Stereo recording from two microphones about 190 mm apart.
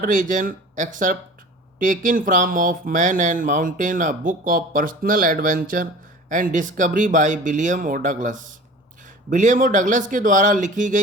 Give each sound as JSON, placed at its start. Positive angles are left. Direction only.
{"t": 0.0, "sound": "speech", "side_deg": -45}